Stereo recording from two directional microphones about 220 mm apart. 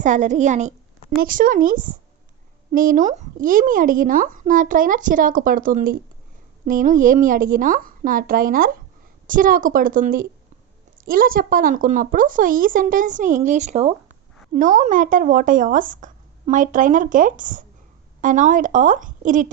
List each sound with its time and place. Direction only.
0.0 s speech: 35° right (ahead or behind)